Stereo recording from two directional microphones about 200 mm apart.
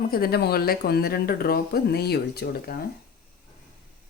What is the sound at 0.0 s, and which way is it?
Speech, 50° left (ahead or behind).